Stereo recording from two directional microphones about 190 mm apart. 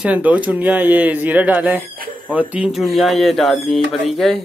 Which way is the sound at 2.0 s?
50° right (ahead or behind).